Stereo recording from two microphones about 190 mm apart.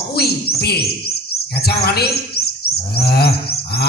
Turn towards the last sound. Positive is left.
turn(degrees=55)  # may be behind; listen again after turning